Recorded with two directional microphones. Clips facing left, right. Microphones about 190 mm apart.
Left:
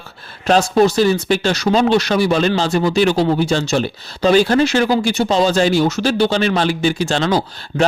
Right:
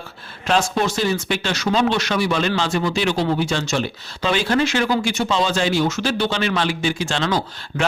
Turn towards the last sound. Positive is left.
turn(degrees=35)  # may be behind; listen again after turning